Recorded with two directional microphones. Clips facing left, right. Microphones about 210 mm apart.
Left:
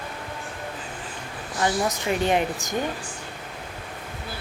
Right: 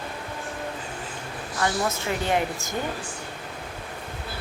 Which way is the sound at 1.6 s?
15° left (ahead or behind).